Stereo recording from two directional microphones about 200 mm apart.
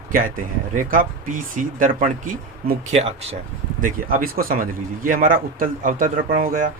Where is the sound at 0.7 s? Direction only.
40° right (ahead or behind).